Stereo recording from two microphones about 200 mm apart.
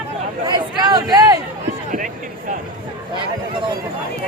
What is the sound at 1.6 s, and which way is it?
Chatter, 40° right (ahead or behind).